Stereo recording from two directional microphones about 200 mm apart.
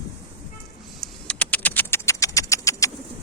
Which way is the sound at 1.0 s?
5° left (ahead or behind).